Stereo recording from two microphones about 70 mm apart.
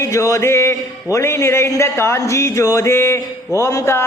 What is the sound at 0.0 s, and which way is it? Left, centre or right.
Speech, left.